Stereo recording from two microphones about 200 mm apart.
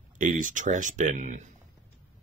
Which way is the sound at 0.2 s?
40° right (ahead or behind).